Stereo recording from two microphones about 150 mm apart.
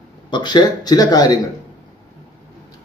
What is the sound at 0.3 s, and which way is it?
A man's voice, 30° left (ahead or behind).